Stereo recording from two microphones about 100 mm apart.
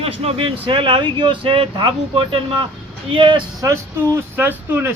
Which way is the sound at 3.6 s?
30° right (ahead or behind).